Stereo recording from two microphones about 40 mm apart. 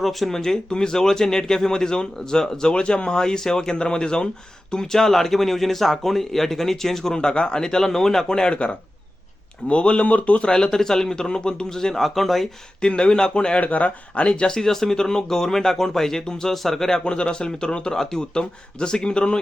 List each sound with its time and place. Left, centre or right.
0.0 s speech: centre
0.3 s speech: centre
8.3 s speech: left
10.0 s speech: left
10.5 s speech: centre
12.8 s speech: left
13.6 s speech: left
14.4 s speech: centre
17.0 s speech: left